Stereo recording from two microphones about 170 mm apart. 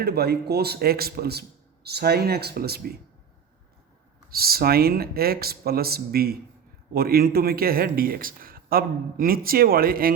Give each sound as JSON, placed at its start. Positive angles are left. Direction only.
{"t": 0.0, "sound": "speech", "side_deg": -70}
{"t": 4.3, "sound": "a man's voice", "side_deg": -65}